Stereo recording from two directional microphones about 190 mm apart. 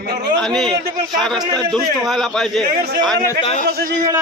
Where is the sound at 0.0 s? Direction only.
60° right (ahead or behind).